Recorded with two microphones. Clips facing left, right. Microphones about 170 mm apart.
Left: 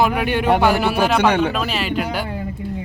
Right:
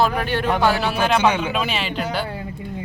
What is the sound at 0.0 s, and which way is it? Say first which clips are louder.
Speech: left 2 dB; 15° left (ahead or behind).